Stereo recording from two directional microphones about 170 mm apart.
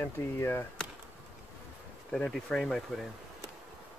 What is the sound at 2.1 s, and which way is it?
Speech, 5° left (ahead or behind).